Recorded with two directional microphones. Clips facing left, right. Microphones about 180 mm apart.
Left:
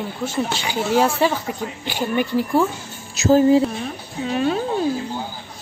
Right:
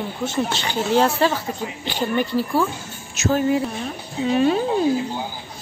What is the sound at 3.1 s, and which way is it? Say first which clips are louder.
Speech: left 6 dB; 35° left (ahead or behind).